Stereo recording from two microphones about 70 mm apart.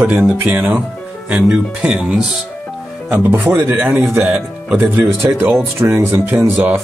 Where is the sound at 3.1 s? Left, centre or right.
Right.